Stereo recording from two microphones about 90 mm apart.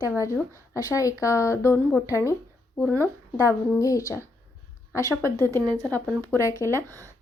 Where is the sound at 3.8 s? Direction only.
40° left (ahead or behind).